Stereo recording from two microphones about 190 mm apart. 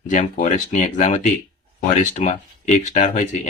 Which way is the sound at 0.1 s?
40° left (ahead or behind).